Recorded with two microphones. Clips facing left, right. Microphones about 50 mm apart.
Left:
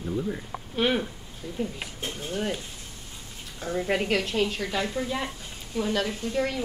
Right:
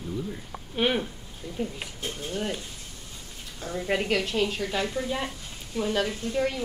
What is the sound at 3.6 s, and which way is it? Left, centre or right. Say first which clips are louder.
Speech: left 4 dB; centre.